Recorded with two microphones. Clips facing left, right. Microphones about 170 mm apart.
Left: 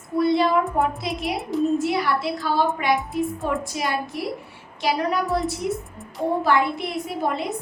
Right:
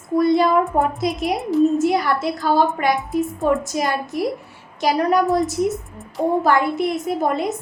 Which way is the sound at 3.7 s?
45° right (ahead or behind).